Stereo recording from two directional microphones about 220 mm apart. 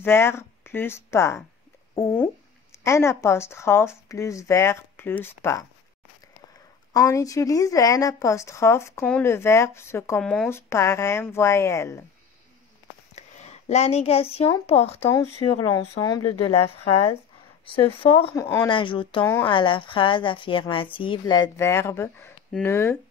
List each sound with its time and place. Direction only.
0.0 s speech: 10° left (ahead or behind)
2.7 s speech: 10° left (ahead or behind)
6.9 s speech: 15° left (ahead or behind)
13.1 s a sound: 30° left (ahead or behind)
14.7 s speech: 25° left (ahead or behind)
15.0 s speech: 15° left (ahead or behind)
18.4 s speech: 10° left (ahead or behind)
18.7 s speech: 20° left (ahead or behind)